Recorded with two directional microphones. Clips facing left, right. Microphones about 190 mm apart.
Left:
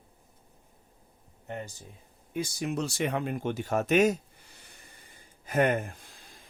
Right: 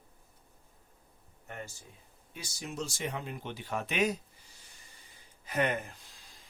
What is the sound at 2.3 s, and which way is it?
Speech, 55° left (ahead or behind).